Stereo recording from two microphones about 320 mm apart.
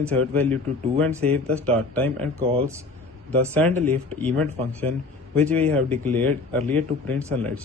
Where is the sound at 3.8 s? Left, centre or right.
Centre.